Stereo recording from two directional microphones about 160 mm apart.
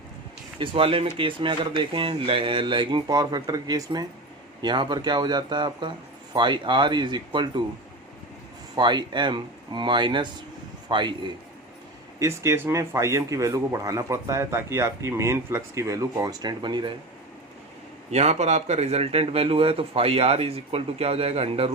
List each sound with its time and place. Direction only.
0.6 s a man's voice: 35° right (ahead or behind)
8.7 s a man's voice: 30° right (ahead or behind)
12.2 s speech: 20° right (ahead or behind)
18.1 s a man's voice: 45° right (ahead or behind)